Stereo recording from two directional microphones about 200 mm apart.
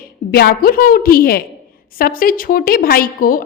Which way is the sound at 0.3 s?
50° left (ahead or behind).